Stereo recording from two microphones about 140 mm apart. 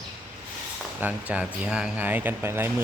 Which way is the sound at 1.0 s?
10° right (ahead or behind).